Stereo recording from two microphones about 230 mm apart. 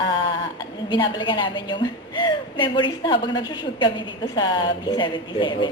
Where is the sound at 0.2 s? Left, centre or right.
Left.